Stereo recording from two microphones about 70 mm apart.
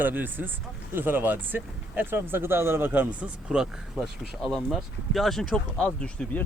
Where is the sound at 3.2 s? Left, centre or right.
Centre.